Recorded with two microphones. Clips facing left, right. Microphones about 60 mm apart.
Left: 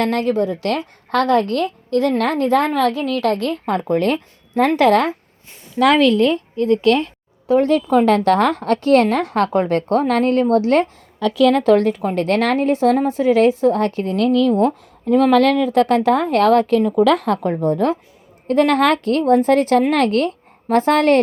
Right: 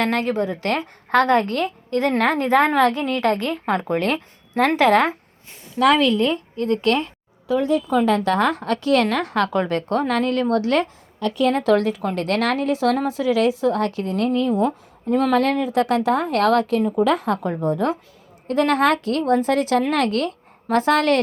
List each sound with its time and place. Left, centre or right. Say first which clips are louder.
0.0 s speech: left 3 dB; centre
0.4 s a woman's voice: left 2 dB; right
2.8 s a woman's voice: left 1 dB; right
3.8 s a woman's voice: left 4 dB; right
4.0 s speech: left 4 dB; centre
6.1 s a woman's voice: left 4 dB; right
7.6 s speech: left 3 dB; left
14.3 s speech: left 6 dB; left
14.5 s a woman's voice: left 4 dB; left
16.8 s a woman's voice: left 4 dB; left